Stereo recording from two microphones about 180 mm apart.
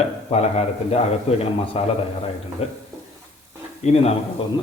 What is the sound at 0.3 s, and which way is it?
A man's voice, 35° left (ahead or behind).